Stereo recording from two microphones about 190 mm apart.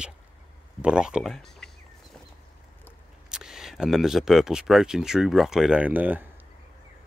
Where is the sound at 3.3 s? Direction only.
5° right (ahead or behind).